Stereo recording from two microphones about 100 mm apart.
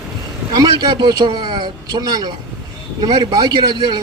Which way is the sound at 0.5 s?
40° right (ahead or behind).